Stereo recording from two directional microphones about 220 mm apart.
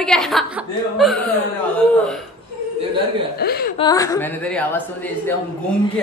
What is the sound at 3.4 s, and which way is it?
Speech, 45° left (ahead or behind).